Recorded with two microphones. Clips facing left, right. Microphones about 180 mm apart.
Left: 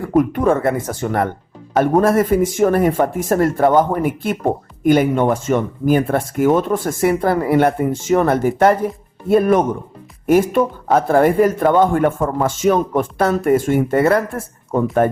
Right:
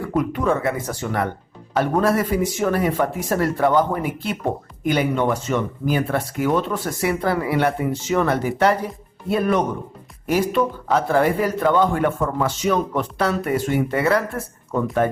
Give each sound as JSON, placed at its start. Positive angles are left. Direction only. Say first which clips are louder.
{"t": 0.0, "sound": "speech", "louder": "left 6 dB", "side_deg": 50}